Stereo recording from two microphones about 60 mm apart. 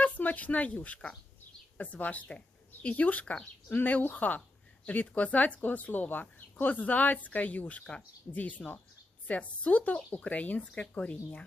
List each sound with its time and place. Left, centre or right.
0.0 s speech: left